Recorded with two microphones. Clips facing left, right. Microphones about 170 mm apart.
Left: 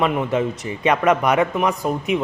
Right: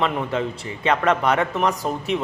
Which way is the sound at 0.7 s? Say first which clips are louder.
Left 2 dB; 15° left (ahead or behind).